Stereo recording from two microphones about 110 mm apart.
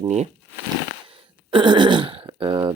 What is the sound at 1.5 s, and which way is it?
Throat clearing, 45° right (ahead or behind).